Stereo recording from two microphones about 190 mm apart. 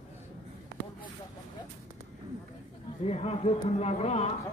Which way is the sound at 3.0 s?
35° left (ahead or behind).